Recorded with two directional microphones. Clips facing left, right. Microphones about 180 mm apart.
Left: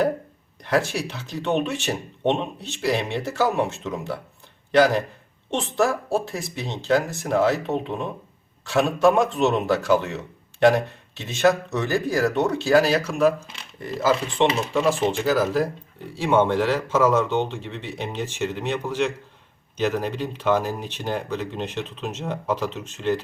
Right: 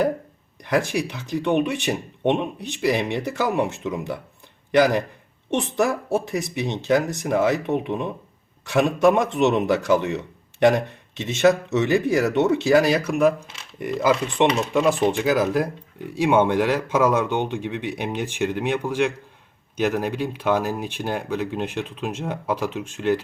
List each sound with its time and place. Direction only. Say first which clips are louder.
0.6 s speech: right 1 dB; 15° right (ahead or behind)